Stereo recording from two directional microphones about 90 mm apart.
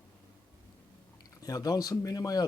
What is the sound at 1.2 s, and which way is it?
Speech, 40° left (ahead or behind).